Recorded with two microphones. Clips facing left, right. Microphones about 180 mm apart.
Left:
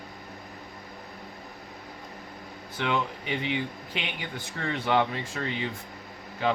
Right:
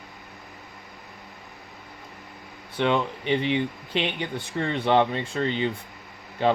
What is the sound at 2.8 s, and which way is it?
Speech, 30° right (ahead or behind).